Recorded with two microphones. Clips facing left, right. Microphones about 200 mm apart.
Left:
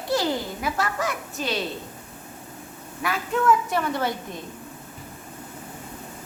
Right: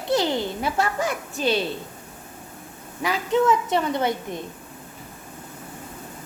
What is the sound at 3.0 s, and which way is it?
Speech, 20° right (ahead or behind).